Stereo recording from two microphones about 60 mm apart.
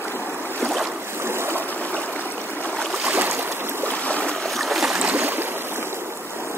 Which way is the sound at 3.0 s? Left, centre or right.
Right.